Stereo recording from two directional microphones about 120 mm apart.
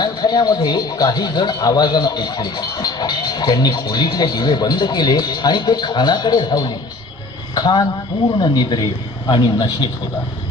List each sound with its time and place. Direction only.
0.0 s speech: 35° left (ahead or behind)